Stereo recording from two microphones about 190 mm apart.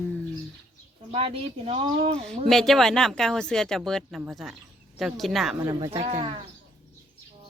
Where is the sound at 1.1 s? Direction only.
30° right (ahead or behind).